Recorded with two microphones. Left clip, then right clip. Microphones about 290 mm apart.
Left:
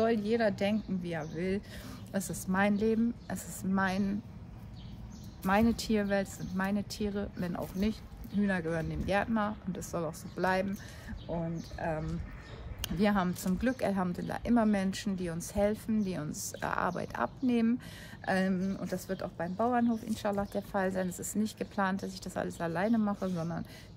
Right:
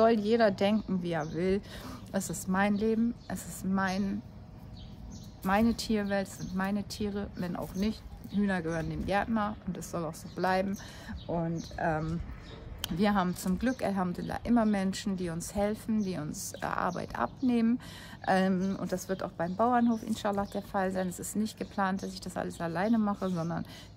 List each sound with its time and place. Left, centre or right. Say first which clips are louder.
0.0 s speech: right 4 dB; centre
5.4 s speech: even; centre